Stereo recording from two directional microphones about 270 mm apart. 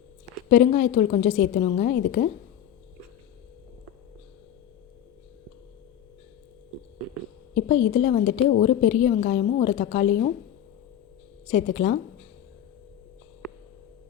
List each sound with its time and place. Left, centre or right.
0.5 s a woman's voice: left
7.7 s a woman's voice: left
11.5 s speech: left